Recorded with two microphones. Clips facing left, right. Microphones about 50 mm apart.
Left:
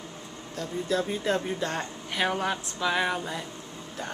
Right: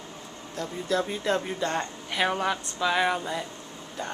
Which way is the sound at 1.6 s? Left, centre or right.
Centre.